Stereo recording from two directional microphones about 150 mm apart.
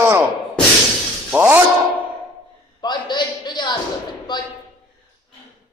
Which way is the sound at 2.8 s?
30° left (ahead or behind).